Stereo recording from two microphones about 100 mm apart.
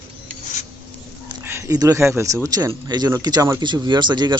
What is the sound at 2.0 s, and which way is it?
A man's voice, 25° right (ahead or behind).